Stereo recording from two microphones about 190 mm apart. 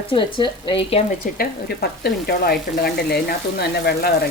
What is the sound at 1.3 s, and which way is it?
Speech, 55° left (ahead or behind).